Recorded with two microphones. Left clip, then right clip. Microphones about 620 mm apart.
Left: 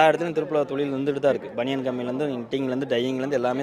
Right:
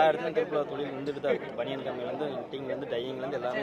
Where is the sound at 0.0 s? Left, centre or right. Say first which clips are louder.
Left 5 dB; left.